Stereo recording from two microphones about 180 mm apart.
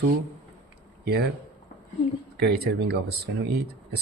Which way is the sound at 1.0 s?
60° right (ahead or behind).